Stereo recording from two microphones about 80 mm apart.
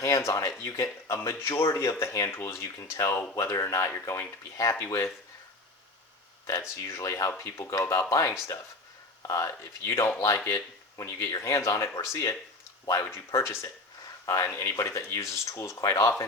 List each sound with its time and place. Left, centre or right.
0.0 s speech: left
6.5 s speech: left